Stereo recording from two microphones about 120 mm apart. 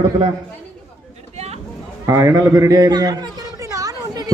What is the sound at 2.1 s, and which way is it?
A man's voice, 25° right (ahead or behind).